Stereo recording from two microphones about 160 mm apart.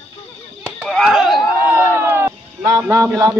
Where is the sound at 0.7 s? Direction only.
Centre (ahead or behind).